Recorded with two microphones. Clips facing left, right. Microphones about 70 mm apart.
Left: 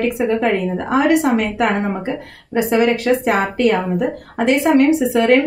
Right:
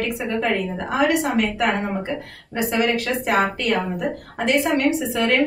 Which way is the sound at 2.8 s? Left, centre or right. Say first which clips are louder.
Left 6 dB; left.